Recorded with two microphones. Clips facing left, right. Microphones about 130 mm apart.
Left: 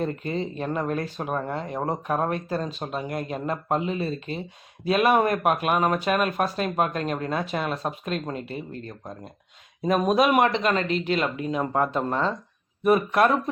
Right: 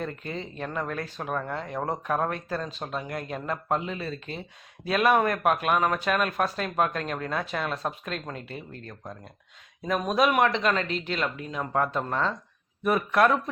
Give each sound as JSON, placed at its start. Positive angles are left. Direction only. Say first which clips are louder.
{"t": 0.3, "sound": "speech", "louder": "left 6 dB", "side_deg": 20}
{"t": 1.4, "sound": "speech", "louder": "left 2 dB", "side_deg": 20}
{"t": 2.7, "sound": "speech", "louder": "left 3 dB", "side_deg": 10}
{"t": 9.9, "sound": "speech", "louder": "left 4 dB", "side_deg": 20}